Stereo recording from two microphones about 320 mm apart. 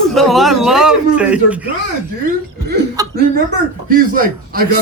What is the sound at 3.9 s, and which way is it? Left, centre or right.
Speech, right.